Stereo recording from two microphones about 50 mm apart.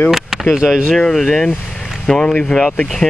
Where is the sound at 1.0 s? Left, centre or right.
Centre.